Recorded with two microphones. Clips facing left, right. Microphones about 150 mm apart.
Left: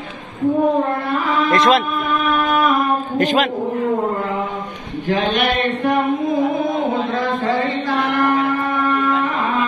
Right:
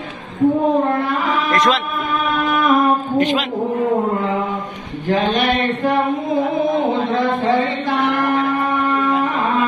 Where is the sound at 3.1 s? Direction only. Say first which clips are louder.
Left 4 dB; 45° left (ahead or behind).